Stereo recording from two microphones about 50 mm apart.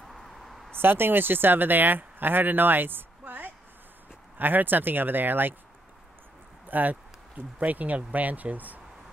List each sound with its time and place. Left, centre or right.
0.1 s a sound: centre
0.7 s speech: right
6.7 s speech: right